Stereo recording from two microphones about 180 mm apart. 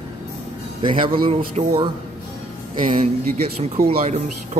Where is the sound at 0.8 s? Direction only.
30° right (ahead or behind).